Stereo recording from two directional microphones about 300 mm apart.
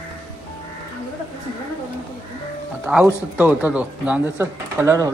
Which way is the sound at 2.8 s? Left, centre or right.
Centre.